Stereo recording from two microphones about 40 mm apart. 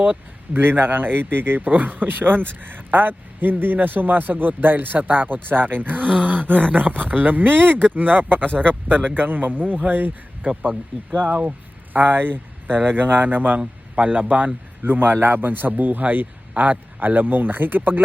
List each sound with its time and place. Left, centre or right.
0.5 s a man's voice: right
6.0 s a man's voice: right
7.9 s a man's voice: right
8.4 s speech: left
8.9 s a man's voice: right
11.9 s speech: right
13.9 s speech: right
14.8 s a man's voice: right